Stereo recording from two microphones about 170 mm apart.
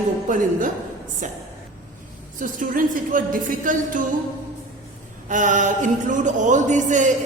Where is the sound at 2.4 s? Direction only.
50° right (ahead or behind).